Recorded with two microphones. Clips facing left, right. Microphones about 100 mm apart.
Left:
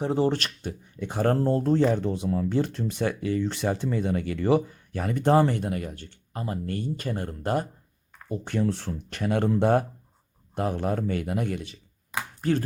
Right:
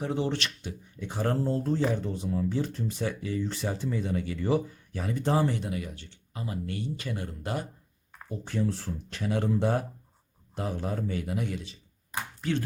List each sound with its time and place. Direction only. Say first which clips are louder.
0.0 s speech: left 5 dB; 35° left (ahead or behind)
8.3 s speech: left 4 dB; 65° left (ahead or behind)
8.9 s speech: left 4 dB; 60° left (ahead or behind)
12.4 s chopping: left 5 dB; 40° left (ahead or behind)